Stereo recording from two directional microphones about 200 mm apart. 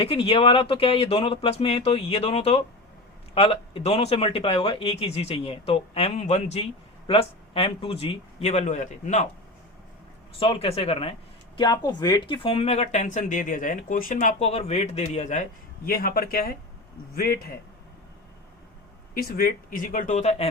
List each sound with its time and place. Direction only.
0.0 s speech: 30° left (ahead or behind)
10.4 s speech: 25° left (ahead or behind); by 17.6 s 50° left (ahead or behind)
19.1 s speech: 45° left (ahead or behind)